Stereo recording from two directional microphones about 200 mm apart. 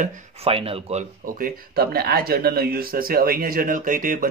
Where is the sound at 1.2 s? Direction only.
45° right (ahead or behind).